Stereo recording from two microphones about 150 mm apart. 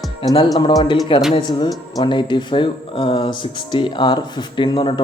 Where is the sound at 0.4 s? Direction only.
25° left (ahead or behind).